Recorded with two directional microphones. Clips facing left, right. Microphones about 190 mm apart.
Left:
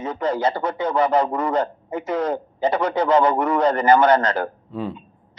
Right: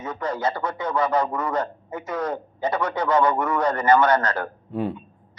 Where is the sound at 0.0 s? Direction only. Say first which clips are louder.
Left 4 dB; 30° left (ahead or behind).